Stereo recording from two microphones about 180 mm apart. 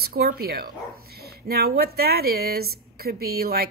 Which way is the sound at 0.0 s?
55° right (ahead or behind).